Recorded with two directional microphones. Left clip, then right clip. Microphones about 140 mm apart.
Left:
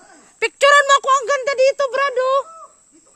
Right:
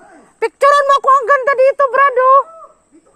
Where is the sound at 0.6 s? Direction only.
50° left (ahead or behind).